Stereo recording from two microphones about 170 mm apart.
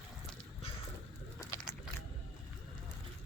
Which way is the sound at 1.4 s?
20° left (ahead or behind).